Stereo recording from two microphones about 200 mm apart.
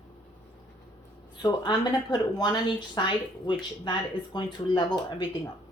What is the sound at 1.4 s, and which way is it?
Speech, 20° left (ahead or behind).